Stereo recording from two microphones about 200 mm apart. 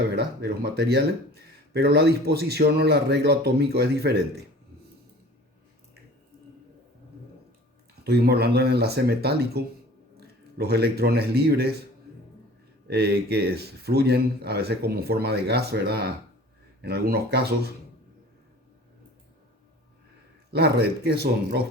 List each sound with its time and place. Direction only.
0.1 s speech: 55° right (ahead or behind)
8.0 s speech: 55° right (ahead or behind)
12.9 s speech: 55° right (ahead or behind)
20.5 s speech: 55° right (ahead or behind)